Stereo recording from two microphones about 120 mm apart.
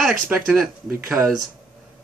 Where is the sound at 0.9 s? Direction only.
20° right (ahead or behind).